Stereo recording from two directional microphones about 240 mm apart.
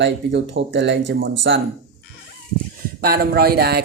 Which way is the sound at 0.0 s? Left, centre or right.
Right.